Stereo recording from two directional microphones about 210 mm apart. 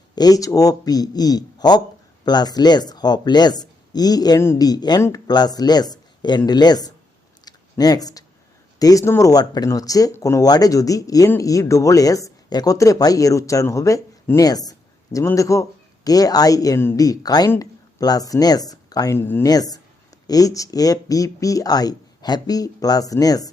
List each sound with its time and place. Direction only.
0.2 s speech: 15° left (ahead or behind)
7.4 s a sound: 20° left (ahead or behind)
8.8 s speech: 15° left (ahead or behind)